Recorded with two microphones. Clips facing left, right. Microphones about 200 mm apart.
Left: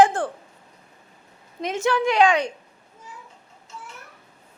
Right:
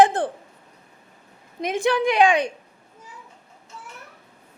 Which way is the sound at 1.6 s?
15° right (ahead or behind).